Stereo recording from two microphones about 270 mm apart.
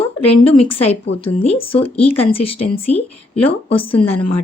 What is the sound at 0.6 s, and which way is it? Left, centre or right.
Speech, left.